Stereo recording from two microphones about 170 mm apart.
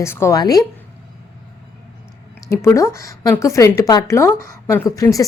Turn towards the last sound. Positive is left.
turn(degrees=20)  # may be behind; listen again after turning